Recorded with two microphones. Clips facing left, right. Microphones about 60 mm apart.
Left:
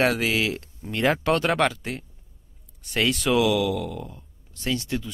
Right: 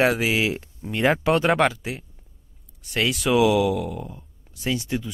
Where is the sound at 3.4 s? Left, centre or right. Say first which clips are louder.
Right 6 dB; right.